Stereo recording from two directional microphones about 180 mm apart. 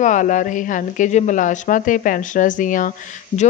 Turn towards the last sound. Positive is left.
turn(degrees=45)  # may be behind; listen again after turning